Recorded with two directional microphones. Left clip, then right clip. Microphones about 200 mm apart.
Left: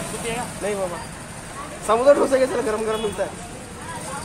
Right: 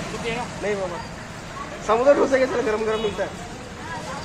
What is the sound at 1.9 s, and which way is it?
Speech, 5° left (ahead or behind).